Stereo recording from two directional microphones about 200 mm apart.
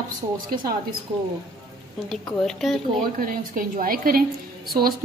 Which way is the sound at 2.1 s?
Centre (ahead or behind).